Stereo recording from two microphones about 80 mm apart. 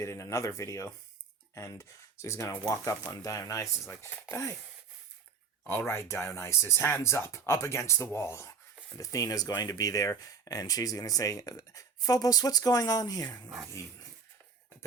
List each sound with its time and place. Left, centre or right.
0.0 s speech: left
5.6 s speech: left
9.0 s speech: left